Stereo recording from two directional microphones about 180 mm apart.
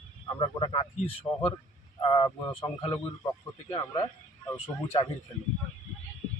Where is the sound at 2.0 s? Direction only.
30° left (ahead or behind).